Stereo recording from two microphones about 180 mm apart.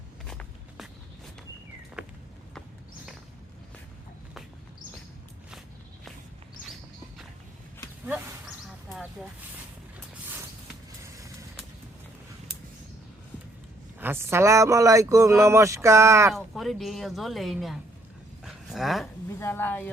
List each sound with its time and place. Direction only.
0.3 s walk: 5° left (ahead or behind)
2.0 s walk: 5° right (ahead or behind)
14.0 s speech: 10° right (ahead or behind)
16.3 s speech: centre (ahead or behind)
18.4 s a sound: centre (ahead or behind)
19.3 s speech: 15° left (ahead or behind)